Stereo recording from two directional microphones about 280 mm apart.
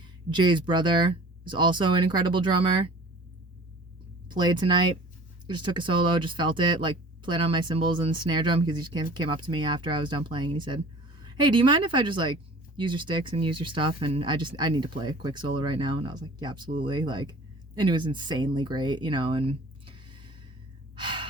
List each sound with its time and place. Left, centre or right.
0.0 s speech: centre
4.3 s speech: centre
20.9 s gasp: centre